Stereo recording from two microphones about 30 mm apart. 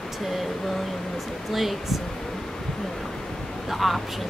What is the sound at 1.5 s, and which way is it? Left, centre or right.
Speech, centre.